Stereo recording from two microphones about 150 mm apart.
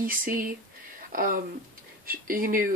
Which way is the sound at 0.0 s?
70° right (ahead or behind).